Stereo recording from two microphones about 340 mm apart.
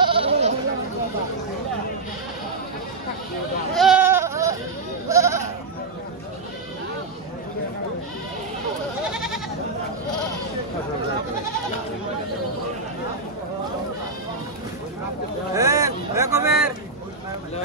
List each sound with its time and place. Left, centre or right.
0.0 s goat: centre
3.7 s goat: centre
9.1 s goat: centre
15.5 s a sound: centre